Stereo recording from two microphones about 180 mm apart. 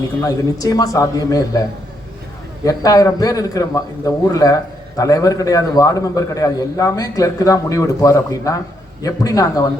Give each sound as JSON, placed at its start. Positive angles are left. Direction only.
{"t": 0.2, "sound": "a man's voice", "side_deg": 20}
{"t": 2.6, "sound": "a man's voice", "side_deg": 20}